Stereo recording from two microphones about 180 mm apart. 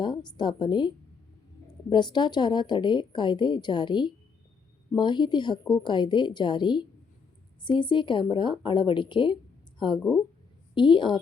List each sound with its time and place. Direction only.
0.0 s speech: 25° left (ahead or behind)